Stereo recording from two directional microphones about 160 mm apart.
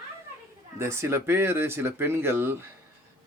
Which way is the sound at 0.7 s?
15° right (ahead or behind).